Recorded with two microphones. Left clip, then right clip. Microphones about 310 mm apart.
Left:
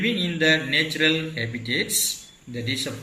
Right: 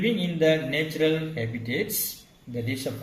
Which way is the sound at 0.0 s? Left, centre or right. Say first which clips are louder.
Left 1 dB; centre.